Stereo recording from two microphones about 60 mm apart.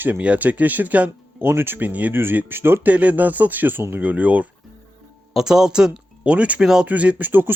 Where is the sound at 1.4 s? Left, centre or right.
Right.